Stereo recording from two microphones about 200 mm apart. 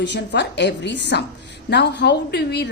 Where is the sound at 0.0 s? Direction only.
60° left (ahead or behind).